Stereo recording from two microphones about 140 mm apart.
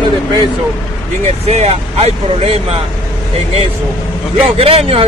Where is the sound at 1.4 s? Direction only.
50° right (ahead or behind).